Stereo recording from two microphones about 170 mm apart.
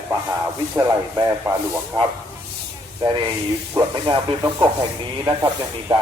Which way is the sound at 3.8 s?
25° right (ahead or behind).